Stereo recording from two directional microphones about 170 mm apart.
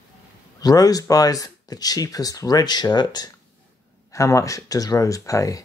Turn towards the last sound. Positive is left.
turn(degrees=20)  # may be behind; listen again after turning